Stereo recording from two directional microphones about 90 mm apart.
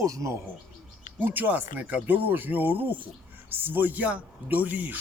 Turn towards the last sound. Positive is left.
turn(degrees=-20)  # may be behind; listen again after turning